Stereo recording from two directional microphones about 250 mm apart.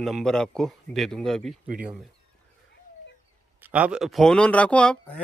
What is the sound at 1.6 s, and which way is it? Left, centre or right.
Speech, right.